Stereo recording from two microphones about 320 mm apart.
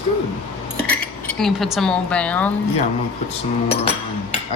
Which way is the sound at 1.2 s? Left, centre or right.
Centre.